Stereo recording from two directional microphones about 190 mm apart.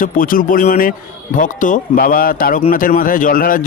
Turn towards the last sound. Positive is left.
turn(degrees=50)  # may be behind; listen again after turning